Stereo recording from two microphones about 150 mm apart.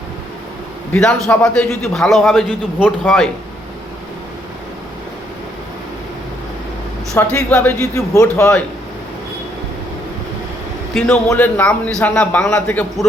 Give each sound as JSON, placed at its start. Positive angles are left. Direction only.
{"t": 0.9, "sound": "a man's voice", "side_deg": 5}
{"t": 7.2, "sound": "a man's voice", "side_deg": 10}
{"t": 7.8, "sound": "a man's voice", "side_deg": 20}
{"t": 11.3, "sound": "a man's voice", "side_deg": 15}